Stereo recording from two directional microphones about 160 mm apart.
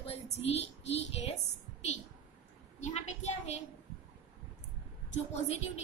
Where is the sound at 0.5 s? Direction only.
40° left (ahead or behind).